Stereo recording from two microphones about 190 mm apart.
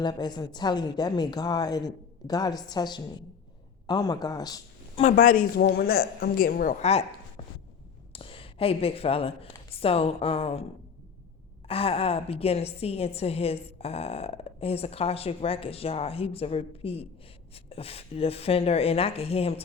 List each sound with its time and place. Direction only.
0.0 s a woman's voice: 20° left (ahead or behind)
5.1 s a woman's voice: 45° left (ahead or behind)
8.1 s a woman's voice: 30° left (ahead or behind)
11.7 s a woman's voice: 30° left (ahead or behind)